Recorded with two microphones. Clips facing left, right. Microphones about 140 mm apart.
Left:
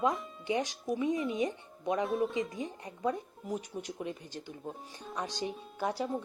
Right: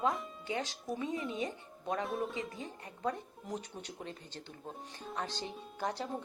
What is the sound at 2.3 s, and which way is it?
Speech, 15° left (ahead or behind).